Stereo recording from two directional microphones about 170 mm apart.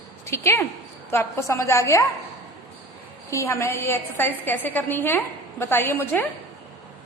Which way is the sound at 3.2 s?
15° left (ahead or behind).